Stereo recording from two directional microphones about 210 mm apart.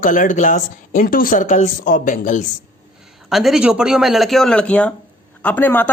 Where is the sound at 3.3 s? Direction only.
Centre (ahead or behind).